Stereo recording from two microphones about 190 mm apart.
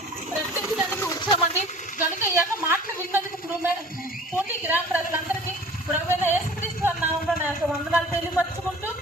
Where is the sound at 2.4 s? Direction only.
5° right (ahead or behind).